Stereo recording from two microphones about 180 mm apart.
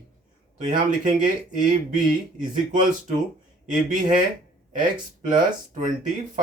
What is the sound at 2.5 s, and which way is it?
Speech, 45° right (ahead or behind).